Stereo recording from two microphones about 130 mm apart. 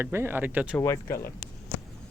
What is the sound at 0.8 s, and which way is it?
Speech, 20° left (ahead or behind).